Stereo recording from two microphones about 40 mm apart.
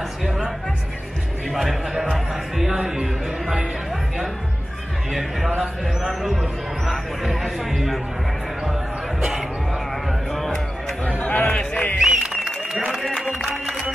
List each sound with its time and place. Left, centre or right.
1.5 s a man's voice: centre
2.7 s speech: centre
5.6 s a man's voice: centre
11.1 s chatter: left
12.0 s applause: centre
13.1 s music: centre